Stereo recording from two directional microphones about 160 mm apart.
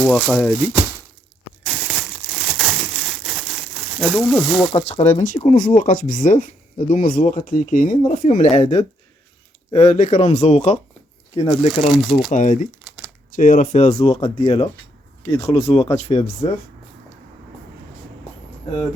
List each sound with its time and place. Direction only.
0.0 s speech: 5° left (ahead or behind)
1.6 s crumpling: centre (ahead or behind)
4.7 s speech: 35° left (ahead or behind); by 8.3 s 55° left (ahead or behind)
8.3 s speech: 40° left (ahead or behind)
11.3 s speech: 25° left (ahead or behind)
11.9 s speech: centre (ahead or behind)
12.3 s speech: 55° left (ahead or behind)
14.1 s speech: 35° left (ahead or behind)